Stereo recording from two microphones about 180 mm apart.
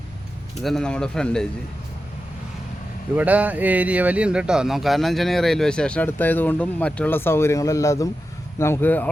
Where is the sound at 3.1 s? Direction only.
10° right (ahead or behind).